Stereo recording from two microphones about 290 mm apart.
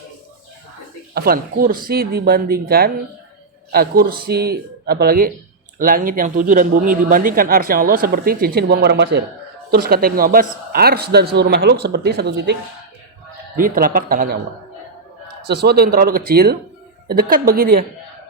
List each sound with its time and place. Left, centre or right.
1.1 s a man's voice: right
13.6 s speech: right
15.4 s a man's voice: right